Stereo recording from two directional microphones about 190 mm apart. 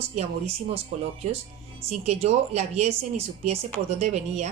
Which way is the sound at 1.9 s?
35° right (ahead or behind).